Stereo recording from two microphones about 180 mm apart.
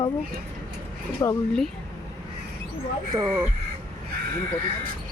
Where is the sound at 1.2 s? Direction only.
20° left (ahead or behind).